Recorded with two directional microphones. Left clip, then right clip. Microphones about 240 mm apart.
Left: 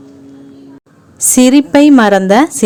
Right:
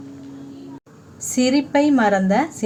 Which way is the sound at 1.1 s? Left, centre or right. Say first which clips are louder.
Left 11 dB; left.